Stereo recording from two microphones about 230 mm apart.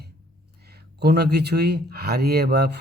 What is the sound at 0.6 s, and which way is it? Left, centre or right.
Speech, right.